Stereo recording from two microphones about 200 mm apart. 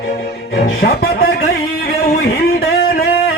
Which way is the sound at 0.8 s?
50° left (ahead or behind).